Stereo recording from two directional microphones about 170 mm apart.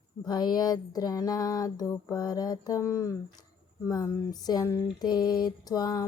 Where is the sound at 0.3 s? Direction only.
25° left (ahead or behind).